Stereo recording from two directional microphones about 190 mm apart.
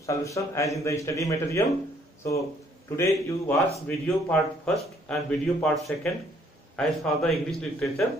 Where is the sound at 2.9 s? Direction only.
15° left (ahead or behind).